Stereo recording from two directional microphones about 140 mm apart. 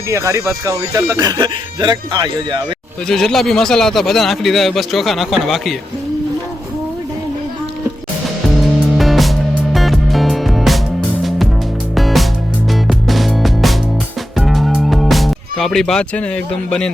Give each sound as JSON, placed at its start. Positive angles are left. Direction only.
{"t": 0.1, "sound": "speech", "side_deg": -20}
{"t": 3.1, "sound": "a man's voice", "side_deg": 5}
{"t": 9.0, "sound": "music", "side_deg": 0}